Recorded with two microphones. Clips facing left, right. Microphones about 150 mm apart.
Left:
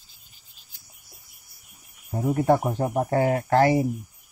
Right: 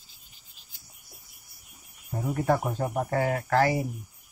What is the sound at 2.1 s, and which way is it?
Speech, 25° left (ahead or behind).